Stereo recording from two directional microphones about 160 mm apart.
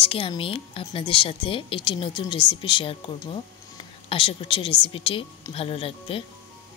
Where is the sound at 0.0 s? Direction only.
35° left (ahead or behind).